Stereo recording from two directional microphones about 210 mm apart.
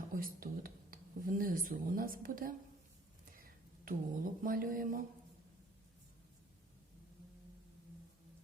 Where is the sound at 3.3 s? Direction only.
40° right (ahead or behind).